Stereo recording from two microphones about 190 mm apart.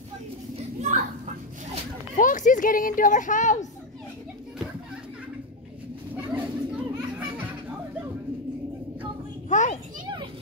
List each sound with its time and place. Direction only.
0.7 s children playing: 40° right (ahead or behind)
2.1 s speech: 45° left (ahead or behind)
6.3 s children playing: 5° right (ahead or behind)
9.5 s children playing: 40° left (ahead or behind)